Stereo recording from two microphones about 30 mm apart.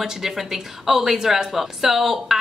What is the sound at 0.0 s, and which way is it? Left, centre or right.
Speech, centre.